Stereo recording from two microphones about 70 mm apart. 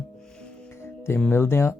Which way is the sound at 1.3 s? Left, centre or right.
Left.